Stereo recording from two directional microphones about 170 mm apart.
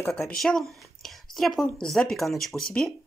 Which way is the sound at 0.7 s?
Centre (ahead or behind).